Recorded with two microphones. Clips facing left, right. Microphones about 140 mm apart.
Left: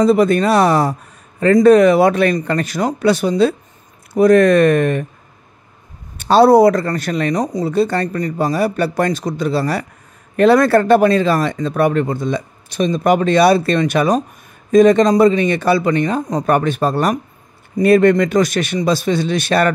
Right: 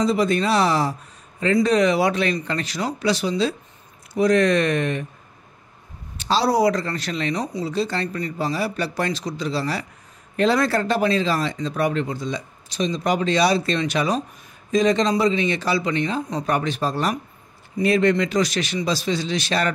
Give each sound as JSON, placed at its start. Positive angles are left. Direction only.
{"t": 0.0, "sound": "speech", "side_deg": 55}
{"t": 6.1, "sound": "speech", "side_deg": 55}